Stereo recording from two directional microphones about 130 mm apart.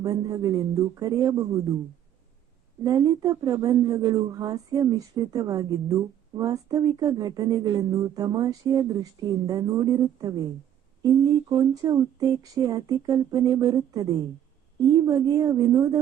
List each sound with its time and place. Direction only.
0.0 s a woman's voice: 30° right (ahead or behind)
2.8 s a woman's voice: 30° right (ahead or behind)